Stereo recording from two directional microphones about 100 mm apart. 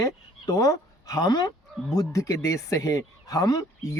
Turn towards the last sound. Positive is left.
turn(degrees=35)  # may be behind; listen again after turning